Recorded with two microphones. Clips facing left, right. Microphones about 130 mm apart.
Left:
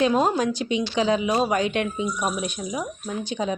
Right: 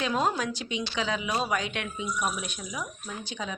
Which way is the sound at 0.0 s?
30° left (ahead or behind).